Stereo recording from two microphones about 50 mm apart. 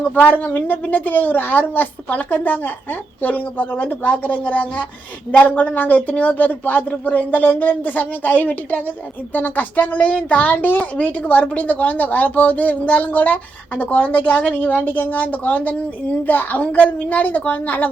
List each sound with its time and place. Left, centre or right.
0.1 s a woman's voice: left
10.8 s a woman's voice: left